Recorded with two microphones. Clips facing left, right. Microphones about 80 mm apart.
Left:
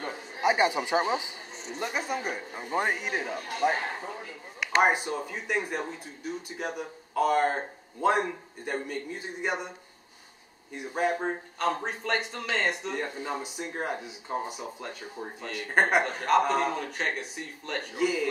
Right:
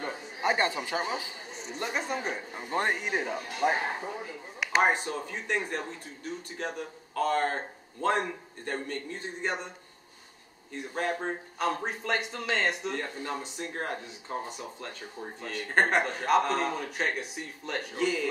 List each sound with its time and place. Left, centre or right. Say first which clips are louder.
0.0 s a man's voice: left 3 dB; centre
1.6 s a man's voice: left 1 dB; centre
10.7 s speech: left 3 dB; centre
11.5 s a man's voice: even; centre